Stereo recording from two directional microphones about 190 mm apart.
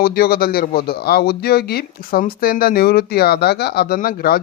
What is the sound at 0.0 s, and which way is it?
Speech, 55° left (ahead or behind).